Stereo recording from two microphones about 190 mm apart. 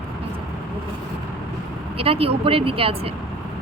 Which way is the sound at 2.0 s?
30° right (ahead or behind).